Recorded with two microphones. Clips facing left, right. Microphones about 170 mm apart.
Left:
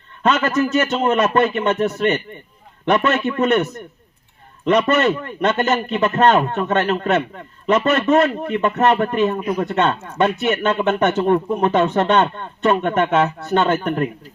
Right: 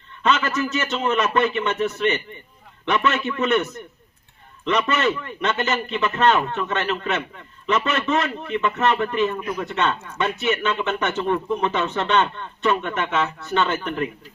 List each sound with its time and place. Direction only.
0.2 s a man's voice: 45° left (ahead or behind)